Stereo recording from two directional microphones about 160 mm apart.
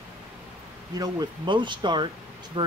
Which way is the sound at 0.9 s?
25° right (ahead or behind).